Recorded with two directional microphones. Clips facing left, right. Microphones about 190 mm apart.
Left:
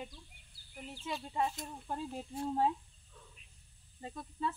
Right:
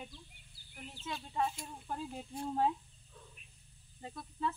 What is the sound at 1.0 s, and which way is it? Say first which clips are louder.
Speech: left 1 dB; 5° left (ahead or behind).